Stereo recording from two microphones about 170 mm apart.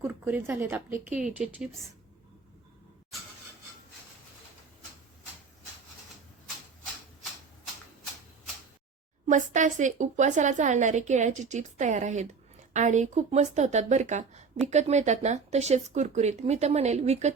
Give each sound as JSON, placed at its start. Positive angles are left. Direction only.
{"t": 0.0, "sound": "a woman's voice", "side_deg": -10}
{"t": 9.2, "sound": "speech", "side_deg": -45}